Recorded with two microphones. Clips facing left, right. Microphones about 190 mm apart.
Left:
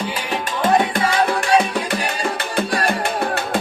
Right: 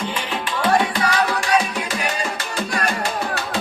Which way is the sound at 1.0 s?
30° left (ahead or behind).